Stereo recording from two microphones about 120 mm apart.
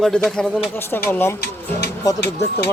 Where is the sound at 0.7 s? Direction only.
20° left (ahead or behind).